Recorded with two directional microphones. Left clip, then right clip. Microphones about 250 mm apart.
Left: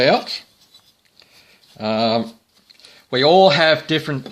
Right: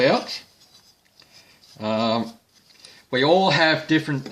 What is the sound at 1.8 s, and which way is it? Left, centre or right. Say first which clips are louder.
Speech: left 4 dB; left.